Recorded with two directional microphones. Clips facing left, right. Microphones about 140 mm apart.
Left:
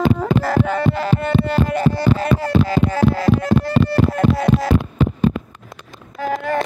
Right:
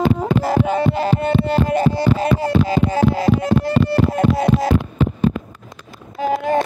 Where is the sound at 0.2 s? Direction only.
20° right (ahead or behind).